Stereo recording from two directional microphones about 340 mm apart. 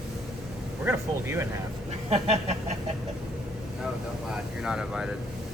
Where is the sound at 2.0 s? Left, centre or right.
Centre.